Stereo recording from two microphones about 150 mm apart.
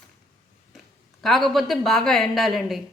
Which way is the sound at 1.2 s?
Centre (ahead or behind).